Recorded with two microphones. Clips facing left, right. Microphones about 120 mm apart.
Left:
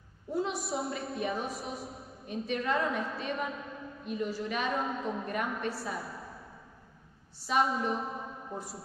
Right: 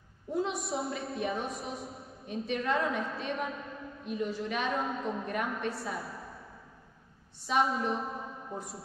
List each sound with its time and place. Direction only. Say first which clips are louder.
0.3 s a woman's voice: even; centre (ahead or behind)